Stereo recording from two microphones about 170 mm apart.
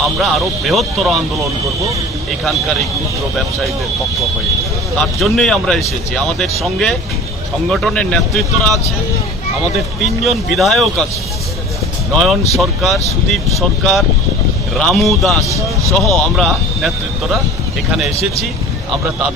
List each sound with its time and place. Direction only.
0.2 s speech: centre (ahead or behind)
4.9 s speech: centre (ahead or behind)
10.0 s speech: centre (ahead or behind)
12.1 s speech: centre (ahead or behind)